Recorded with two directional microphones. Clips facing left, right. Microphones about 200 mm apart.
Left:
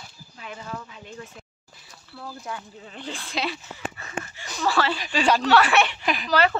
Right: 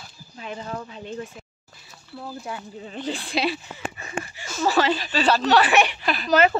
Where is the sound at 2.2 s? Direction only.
20° right (ahead or behind).